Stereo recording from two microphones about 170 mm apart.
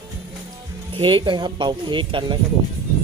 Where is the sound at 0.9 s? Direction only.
30° right (ahead or behind).